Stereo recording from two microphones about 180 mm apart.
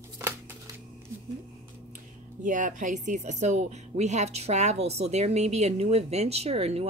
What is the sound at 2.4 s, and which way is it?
Speech, 45° right (ahead or behind).